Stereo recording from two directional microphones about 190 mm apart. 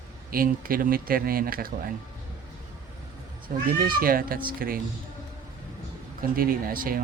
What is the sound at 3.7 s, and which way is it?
Speech, 50° right (ahead or behind).